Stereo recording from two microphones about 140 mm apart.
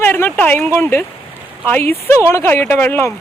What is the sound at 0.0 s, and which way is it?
Speech, 15° left (ahead or behind).